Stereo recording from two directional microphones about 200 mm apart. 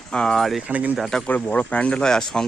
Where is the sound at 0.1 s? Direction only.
5° left (ahead or behind).